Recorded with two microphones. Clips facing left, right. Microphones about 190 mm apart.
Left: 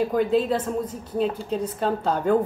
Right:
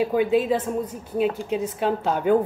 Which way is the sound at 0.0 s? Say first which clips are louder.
Right 1 dB; 5° right (ahead or behind).